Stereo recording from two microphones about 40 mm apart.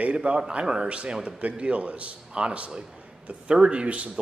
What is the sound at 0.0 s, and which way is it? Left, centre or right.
Speech, right.